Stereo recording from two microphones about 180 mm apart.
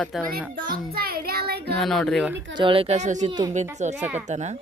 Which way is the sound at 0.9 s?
60° right (ahead or behind).